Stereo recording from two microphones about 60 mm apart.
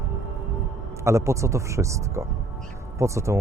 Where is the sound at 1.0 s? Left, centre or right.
Right.